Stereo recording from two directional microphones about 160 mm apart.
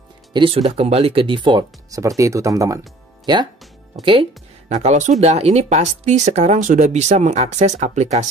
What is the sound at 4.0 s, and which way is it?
Speech, 30° right (ahead or behind).